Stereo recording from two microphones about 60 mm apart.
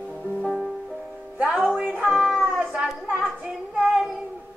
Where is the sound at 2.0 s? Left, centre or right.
Centre.